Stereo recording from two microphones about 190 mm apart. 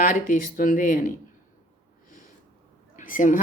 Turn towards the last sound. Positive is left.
turn(degrees=45)  # may be behind; listen again after turning